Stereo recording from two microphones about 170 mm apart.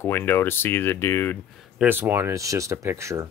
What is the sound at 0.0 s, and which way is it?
Speech, 10° left (ahead or behind).